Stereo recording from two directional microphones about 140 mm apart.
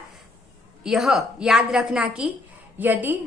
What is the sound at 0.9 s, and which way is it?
A woman's voice, 5° right (ahead or behind).